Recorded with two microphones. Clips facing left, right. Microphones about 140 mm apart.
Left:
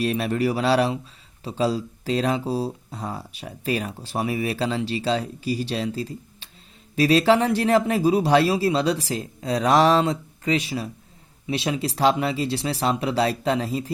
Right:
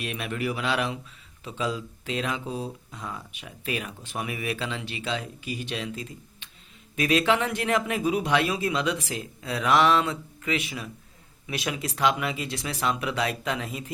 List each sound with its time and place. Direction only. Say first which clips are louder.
0.0 s speech: left 8 dB; 35° left (ahead or behind)